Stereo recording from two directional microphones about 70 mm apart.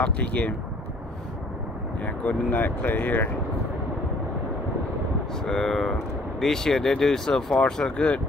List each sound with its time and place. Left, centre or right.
0.0 s speech: centre
2.0 s speech: left
5.4 s speech: centre